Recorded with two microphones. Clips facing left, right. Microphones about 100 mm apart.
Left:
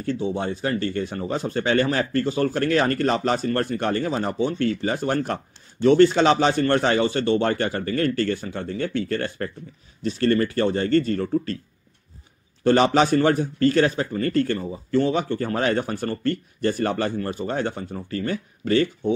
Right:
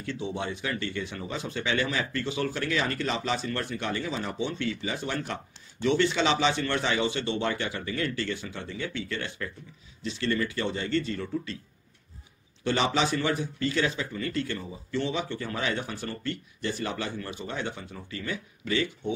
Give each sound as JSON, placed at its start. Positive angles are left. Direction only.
{"t": 0.0, "sound": "speech", "side_deg": 35}
{"t": 12.6, "sound": "speech", "side_deg": 50}